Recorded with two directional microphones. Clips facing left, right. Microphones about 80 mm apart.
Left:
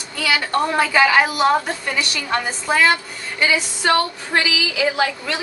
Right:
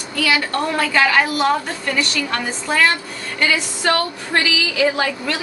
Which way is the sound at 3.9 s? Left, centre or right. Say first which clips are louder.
Left 2 dB; centre.